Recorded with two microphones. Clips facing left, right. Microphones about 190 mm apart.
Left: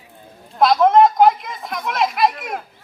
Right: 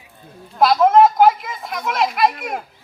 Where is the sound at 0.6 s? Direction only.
Centre (ahead or behind).